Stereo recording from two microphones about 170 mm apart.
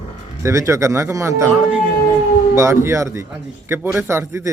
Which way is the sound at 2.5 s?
15° right (ahead or behind).